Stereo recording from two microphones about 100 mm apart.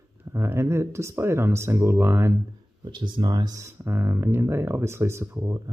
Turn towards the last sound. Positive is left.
turn(degrees=-30)  # may be behind; listen again after turning